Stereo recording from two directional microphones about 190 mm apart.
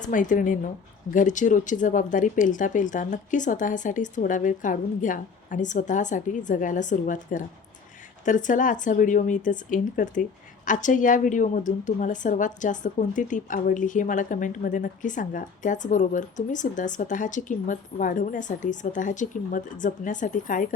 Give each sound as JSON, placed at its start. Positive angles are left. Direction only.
{"t": 0.0, "sound": "a woman's voice", "side_deg": 45}